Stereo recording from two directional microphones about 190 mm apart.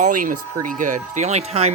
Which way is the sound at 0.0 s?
45° right (ahead or behind).